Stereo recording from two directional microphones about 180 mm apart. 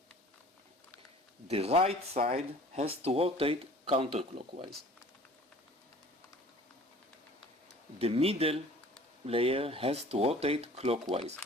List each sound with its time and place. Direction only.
1.5 s speech: 35° right (ahead or behind)
7.9 s speech: 35° right (ahead or behind)